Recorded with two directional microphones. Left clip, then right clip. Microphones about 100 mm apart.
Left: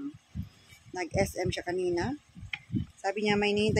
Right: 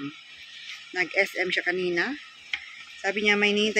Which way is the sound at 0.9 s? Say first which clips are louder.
Right 6 dB; 25° left (ahead or behind).